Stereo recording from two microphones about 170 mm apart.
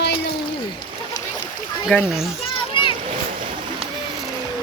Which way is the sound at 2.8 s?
30° left (ahead or behind).